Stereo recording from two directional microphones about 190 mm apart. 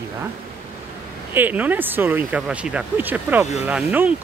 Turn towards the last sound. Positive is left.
turn(degrees=-5)  # may be behind; listen again after turning